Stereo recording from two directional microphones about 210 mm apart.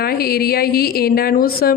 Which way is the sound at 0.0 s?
45° left (ahead or behind).